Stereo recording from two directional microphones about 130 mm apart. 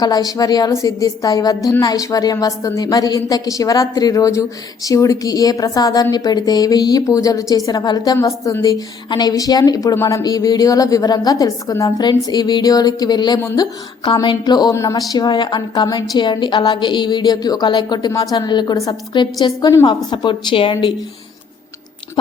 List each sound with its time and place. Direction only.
0.0 s a woman's voice: 30° left (ahead or behind)